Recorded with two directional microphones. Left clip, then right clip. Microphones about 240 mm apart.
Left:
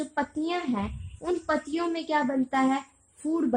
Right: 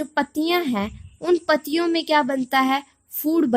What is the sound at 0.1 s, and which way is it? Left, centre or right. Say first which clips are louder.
A woman's voice: right 10 dB; right.